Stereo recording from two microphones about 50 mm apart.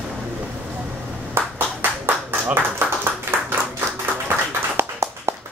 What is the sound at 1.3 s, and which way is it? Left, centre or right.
Clapping, right.